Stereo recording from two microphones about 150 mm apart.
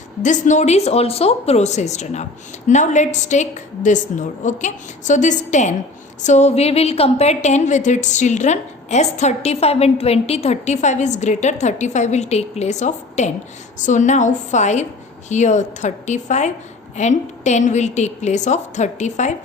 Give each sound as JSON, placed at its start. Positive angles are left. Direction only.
{"t": 0.2, "sound": "a woman's voice", "side_deg": 55}